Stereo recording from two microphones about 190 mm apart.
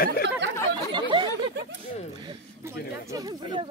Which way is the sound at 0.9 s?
25° right (ahead or behind).